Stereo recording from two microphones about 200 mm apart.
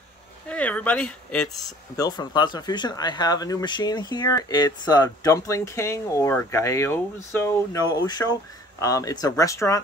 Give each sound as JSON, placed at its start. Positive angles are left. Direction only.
{"t": 0.5, "sound": "speech", "side_deg": 5}
{"t": 1.6, "sound": "speech", "side_deg": 20}